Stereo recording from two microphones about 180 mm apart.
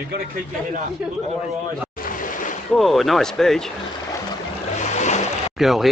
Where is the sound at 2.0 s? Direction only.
50° left (ahead or behind).